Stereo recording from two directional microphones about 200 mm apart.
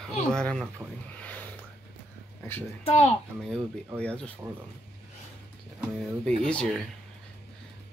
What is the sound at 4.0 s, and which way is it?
Speech, 5° left (ahead or behind).